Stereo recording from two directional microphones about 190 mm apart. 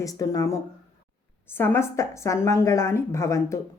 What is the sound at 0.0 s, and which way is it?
Speech, 15° left (ahead or behind).